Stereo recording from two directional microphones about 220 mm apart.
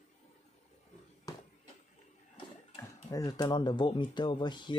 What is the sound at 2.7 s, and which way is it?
Speech, 15° left (ahead or behind).